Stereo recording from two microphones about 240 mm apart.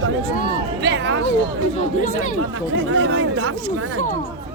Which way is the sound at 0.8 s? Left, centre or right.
Right.